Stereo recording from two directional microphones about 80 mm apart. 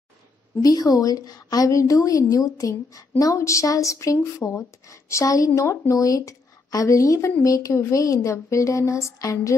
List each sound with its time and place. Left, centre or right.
0.6 s a woman's voice: left